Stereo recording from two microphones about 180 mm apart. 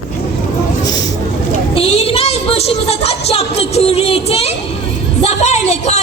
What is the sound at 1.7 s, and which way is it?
A woman's voice, 35° left (ahead or behind).